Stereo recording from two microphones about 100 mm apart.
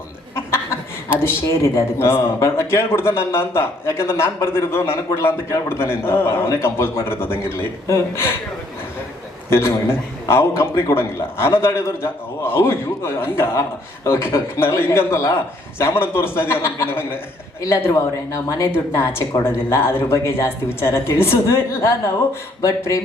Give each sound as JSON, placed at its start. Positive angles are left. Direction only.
{"t": 0.3, "sound": "chuckle", "side_deg": 25}
{"t": 1.2, "sound": "speech", "side_deg": 25}
{"t": 9.5, "sound": "speech", "side_deg": 25}